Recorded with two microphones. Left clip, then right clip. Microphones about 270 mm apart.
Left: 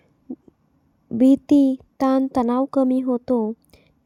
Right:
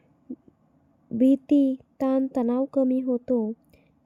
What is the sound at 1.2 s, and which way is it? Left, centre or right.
Speech, left.